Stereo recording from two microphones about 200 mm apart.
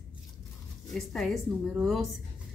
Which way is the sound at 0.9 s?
Centre (ahead or behind).